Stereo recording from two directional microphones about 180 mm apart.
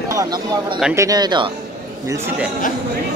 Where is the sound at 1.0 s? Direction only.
20° right (ahead or behind).